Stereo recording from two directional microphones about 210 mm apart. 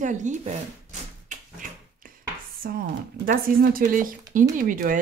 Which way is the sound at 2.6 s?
45° right (ahead or behind).